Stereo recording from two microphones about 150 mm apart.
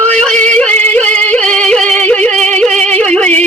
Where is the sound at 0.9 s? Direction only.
10° left (ahead or behind).